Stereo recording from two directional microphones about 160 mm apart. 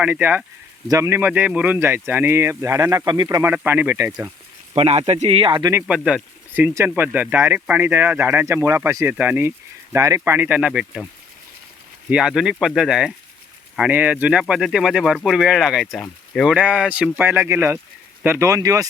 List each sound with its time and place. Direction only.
0.0 s speech: 10° right (ahead or behind)
3.5 s speech: 10° right (ahead or behind)
4.7 s speech: 40° right (ahead or behind)
5.7 s speech: 5° right (ahead or behind)
12.1 s speech: 5° right (ahead or behind); by 18.9 s 20° right (ahead or behind)